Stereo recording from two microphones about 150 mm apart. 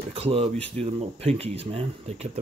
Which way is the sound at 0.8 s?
45° right (ahead or behind).